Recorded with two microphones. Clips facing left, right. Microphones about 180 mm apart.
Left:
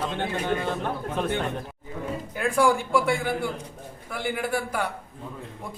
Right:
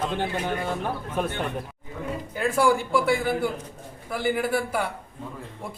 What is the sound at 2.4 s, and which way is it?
Speech, centre (ahead or behind).